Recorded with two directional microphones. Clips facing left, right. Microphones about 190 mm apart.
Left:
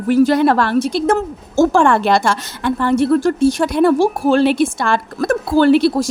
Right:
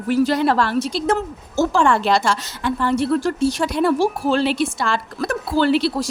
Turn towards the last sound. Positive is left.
turn(degrees=45)  # may be behind; listen again after turning